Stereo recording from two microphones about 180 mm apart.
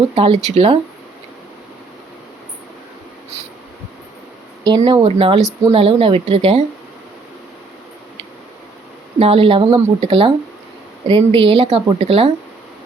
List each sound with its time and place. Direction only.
0.2 s a woman's voice: 35° right (ahead or behind)
4.8 s a woman's voice: 35° right (ahead or behind)
9.1 s a woman's voice: 30° right (ahead or behind)